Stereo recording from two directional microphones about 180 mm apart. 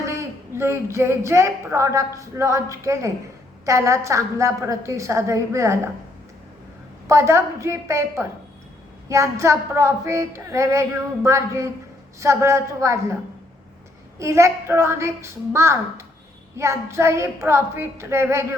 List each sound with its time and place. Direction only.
0.0 s speech: 15° right (ahead or behind)
7.1 s speech: 15° right (ahead or behind)
14.2 s speech: 15° right (ahead or behind)